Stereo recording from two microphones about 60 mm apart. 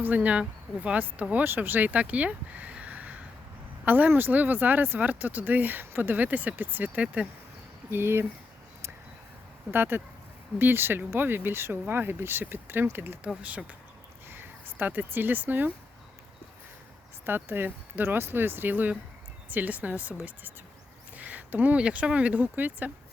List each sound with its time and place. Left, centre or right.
0.0 s speech: right
7.0 s speech: right
7.9 s speech: right
9.7 s speech: right
14.3 s speech: right
17.2 s speech: right
21.2 s speech: right